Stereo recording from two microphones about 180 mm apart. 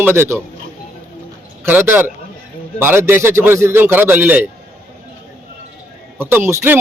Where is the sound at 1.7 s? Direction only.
10° right (ahead or behind).